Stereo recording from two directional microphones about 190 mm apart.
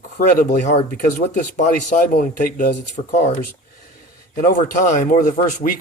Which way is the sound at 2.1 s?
40° left (ahead or behind).